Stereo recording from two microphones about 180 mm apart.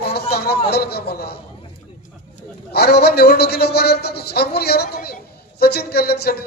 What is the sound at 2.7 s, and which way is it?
A man's voice, 60° left (ahead or behind).